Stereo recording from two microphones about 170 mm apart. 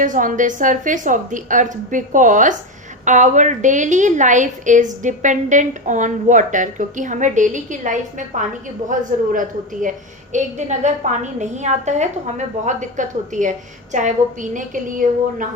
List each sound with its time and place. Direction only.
0.0 s a woman's voice: 50° right (ahead or behind)
14.5 s a woman's voice: 50° right (ahead or behind)